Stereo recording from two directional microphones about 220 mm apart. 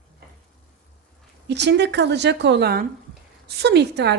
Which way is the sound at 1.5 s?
50° right (ahead or behind).